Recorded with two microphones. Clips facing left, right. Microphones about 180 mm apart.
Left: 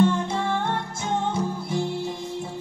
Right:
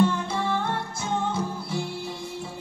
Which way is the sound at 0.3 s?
20° left (ahead or behind).